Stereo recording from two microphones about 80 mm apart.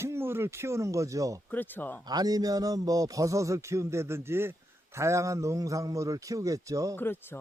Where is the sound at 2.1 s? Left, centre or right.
Right.